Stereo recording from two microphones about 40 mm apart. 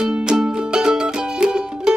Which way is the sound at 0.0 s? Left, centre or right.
Centre.